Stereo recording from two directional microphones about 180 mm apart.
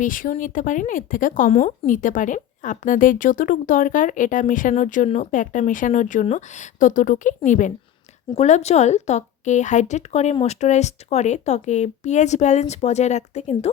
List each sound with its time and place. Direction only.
0.0 s speech: 50° left (ahead or behind)